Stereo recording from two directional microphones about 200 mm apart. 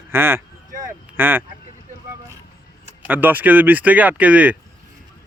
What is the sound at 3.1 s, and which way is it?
Speech, 10° right (ahead or behind).